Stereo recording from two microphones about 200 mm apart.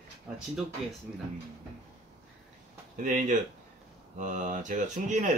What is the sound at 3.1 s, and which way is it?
Speech, 40° right (ahead or behind).